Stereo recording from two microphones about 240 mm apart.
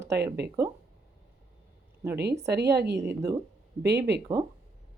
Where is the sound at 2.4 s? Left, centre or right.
Right.